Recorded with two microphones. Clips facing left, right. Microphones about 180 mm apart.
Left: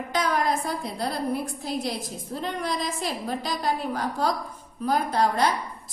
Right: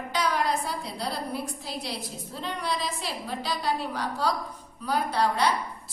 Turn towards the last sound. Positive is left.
turn(degrees=50)  # may be behind; listen again after turning